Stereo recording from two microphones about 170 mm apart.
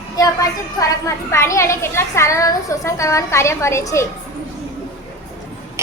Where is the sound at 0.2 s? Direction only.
20° left (ahead or behind).